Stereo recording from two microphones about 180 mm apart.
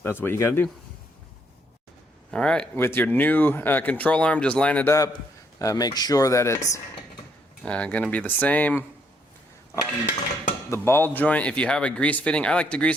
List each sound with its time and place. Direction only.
0.0 s speech: 10° left (ahead or behind)
2.3 s speech: 5° left (ahead or behind)
7.6 s speech: 5° left (ahead or behind)
10.7 s speech: 15° left (ahead or behind)